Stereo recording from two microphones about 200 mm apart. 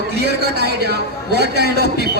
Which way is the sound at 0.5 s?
55° right (ahead or behind).